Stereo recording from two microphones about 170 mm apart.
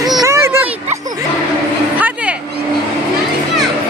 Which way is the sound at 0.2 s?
15° right (ahead or behind).